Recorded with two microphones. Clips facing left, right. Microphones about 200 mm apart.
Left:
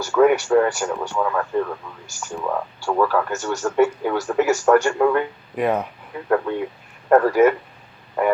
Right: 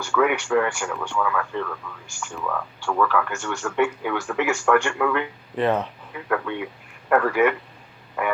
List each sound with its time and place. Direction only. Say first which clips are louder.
0.0 s speech: left 6 dB; 40° left (ahead or behind)
2.3 s speech: left 4 dB; 30° left (ahead or behind)
5.5 s speech: left 1 dB; 10° left (ahead or behind)
6.1 s speech: left 5 dB; 35° left (ahead or behind)